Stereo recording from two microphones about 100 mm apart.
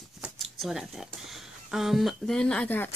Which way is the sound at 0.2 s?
Centre (ahead or behind).